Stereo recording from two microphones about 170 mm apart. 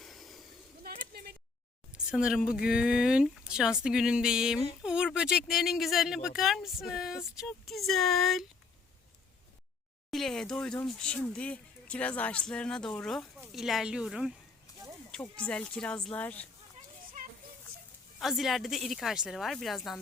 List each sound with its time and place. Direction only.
0.0 s vehicle: centre (ahead or behind)
0.8 s a sound: 65° right (ahead or behind)
2.0 s speech: 5° right (ahead or behind)
10.1 s speech: centre (ahead or behind)
18.2 s speech: centre (ahead or behind)